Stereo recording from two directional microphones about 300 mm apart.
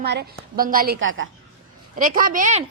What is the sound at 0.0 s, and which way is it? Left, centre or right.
A woman's voice, right.